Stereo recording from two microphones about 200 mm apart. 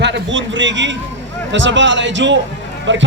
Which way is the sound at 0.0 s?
65° right (ahead or behind).